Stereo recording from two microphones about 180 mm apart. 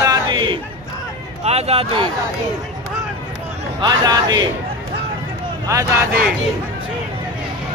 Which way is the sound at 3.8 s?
20° right (ahead or behind).